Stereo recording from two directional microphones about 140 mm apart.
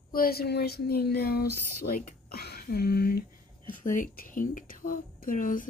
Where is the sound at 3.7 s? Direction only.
70° left (ahead or behind).